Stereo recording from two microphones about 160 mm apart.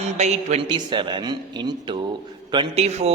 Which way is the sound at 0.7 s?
30° right (ahead or behind).